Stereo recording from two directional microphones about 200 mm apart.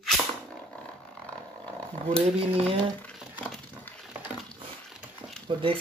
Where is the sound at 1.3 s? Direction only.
5° left (ahead or behind).